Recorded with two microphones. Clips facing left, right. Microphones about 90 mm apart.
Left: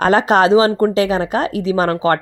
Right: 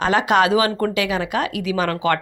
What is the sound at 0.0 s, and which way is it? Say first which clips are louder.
Speech: left 4 dB; 40° left (ahead or behind).